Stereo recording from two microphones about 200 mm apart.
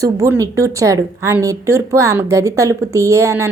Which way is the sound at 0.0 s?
15° right (ahead or behind).